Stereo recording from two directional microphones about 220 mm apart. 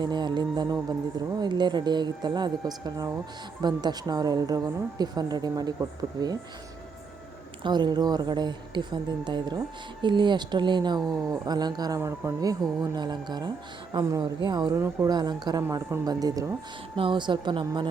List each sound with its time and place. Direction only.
0.0 s speech: 20° right (ahead or behind)
7.6 s speech: 20° right (ahead or behind)